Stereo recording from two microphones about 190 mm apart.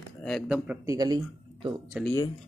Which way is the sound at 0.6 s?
20° right (ahead or behind).